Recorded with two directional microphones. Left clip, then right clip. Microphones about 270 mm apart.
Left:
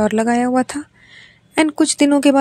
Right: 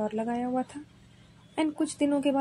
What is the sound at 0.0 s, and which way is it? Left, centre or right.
Speech, left.